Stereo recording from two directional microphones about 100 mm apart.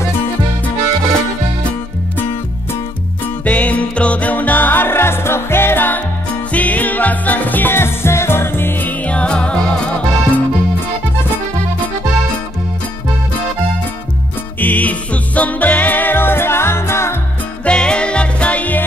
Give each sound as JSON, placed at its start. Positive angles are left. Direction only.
{"t": 3.4, "sound": "music", "side_deg": 15}
{"t": 14.6, "sound": "music", "side_deg": 15}
{"t": 17.6, "sound": "music", "side_deg": 10}